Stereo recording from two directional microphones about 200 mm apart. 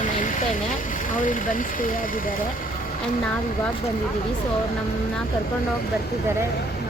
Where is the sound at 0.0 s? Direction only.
40° left (ahead or behind).